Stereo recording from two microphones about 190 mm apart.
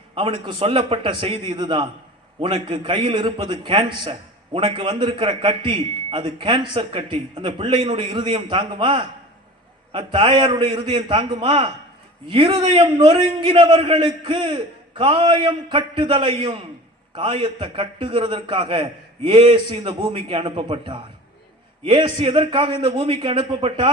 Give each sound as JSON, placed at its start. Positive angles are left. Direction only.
{"t": 0.1, "sound": "a man's voice", "side_deg": -25}